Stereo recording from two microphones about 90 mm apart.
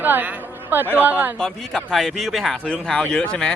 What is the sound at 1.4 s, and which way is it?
Speech, 5° left (ahead or behind).